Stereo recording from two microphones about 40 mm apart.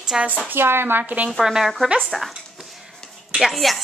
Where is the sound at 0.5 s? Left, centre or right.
Right.